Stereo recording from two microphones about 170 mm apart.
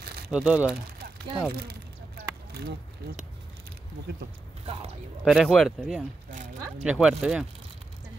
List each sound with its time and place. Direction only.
0.3 s speech: 5° right (ahead or behind)
1.5 s a sound: 65° right (ahead or behind)
5.2 s speech: centre (ahead or behind)